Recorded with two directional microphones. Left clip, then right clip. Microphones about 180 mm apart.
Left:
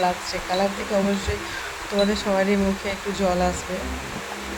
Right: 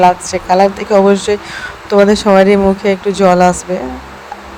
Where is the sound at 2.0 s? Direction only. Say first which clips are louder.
Right 14 dB; 45° right (ahead or behind).